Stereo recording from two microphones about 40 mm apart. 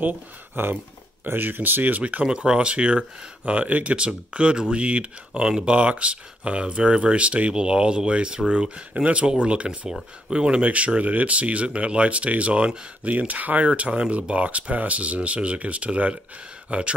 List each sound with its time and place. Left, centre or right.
1.2 s speech: right
2.2 s speech: right
7.5 s speech: right
10.6 s speech: right